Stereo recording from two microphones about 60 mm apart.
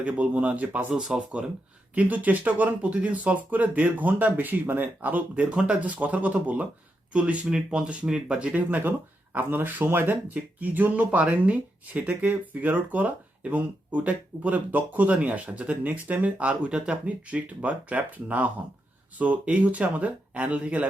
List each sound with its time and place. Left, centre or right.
0.0 s speech: right